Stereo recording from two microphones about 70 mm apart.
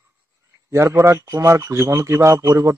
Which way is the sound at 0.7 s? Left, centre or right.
Right.